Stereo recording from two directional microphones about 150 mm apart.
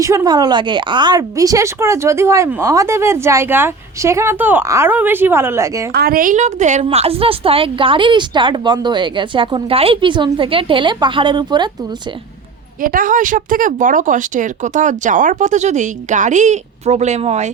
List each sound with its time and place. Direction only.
0.0 s speech: 20° right (ahead or behind)
5.9 s speech: 85° right; by 6.8 s 50° right (ahead or behind)
6.8 s speech: 40° right (ahead or behind)
12.8 s speech: 70° right (ahead or behind); by 17.5 s 45° right (ahead or behind)